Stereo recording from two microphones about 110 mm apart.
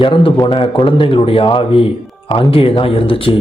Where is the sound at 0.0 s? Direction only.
55° left (ahead or behind).